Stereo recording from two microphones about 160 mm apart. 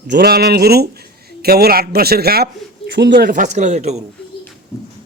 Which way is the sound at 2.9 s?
90° right.